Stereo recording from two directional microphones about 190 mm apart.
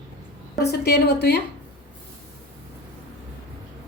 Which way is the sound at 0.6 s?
60° left (ahead or behind).